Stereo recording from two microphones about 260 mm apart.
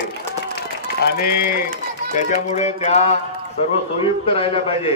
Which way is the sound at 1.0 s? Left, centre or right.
Left.